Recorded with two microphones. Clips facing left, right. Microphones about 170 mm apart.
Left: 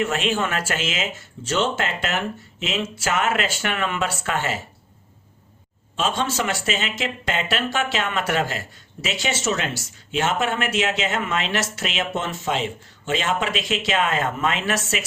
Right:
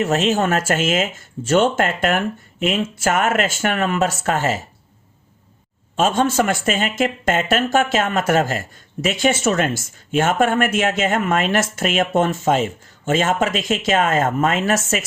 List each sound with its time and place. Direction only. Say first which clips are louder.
0.0 s speech: right 5 dB; 40° right (ahead or behind)
6.0 s speech: right 7 dB; 50° right (ahead or behind)